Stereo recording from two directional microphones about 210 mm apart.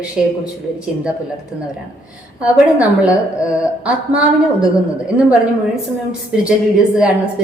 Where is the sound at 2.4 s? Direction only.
5° right (ahead or behind).